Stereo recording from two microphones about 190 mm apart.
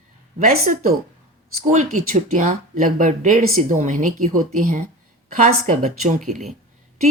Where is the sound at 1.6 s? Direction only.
40° right (ahead or behind).